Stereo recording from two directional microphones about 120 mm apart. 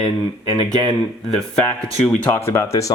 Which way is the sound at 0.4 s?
35° right (ahead or behind).